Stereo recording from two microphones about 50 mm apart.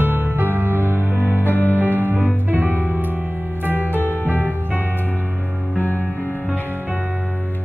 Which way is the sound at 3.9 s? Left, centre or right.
Left.